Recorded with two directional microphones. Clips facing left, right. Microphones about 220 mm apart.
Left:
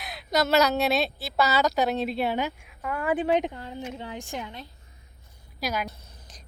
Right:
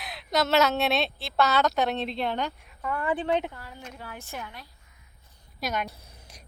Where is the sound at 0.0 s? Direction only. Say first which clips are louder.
Left 1 dB; centre (ahead or behind); by 4.7 s 20° left (ahead or behind).